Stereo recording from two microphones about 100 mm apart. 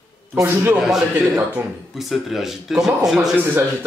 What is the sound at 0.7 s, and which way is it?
Speech, 5° right (ahead or behind).